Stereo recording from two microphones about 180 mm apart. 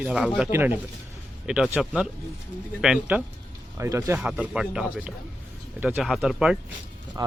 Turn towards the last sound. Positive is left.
turn(degrees=-20)  # may be behind; listen again after turning